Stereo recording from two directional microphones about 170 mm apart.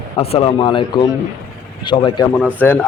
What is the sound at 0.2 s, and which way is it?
Speech, 35° left (ahead or behind).